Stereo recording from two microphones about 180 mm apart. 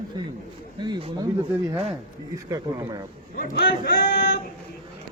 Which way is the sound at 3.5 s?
65° left (ahead or behind).